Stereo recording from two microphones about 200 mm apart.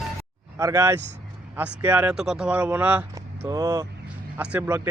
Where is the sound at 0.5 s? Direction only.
15° right (ahead or behind).